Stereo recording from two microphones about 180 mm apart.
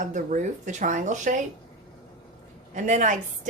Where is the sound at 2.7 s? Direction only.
45° right (ahead or behind).